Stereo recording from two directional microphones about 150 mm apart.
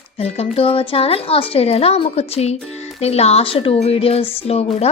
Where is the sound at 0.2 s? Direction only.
40° left (ahead or behind).